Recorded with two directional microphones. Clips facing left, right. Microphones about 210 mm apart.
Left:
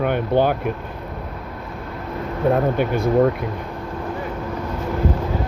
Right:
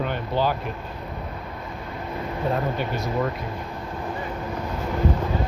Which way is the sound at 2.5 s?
55° left (ahead or behind).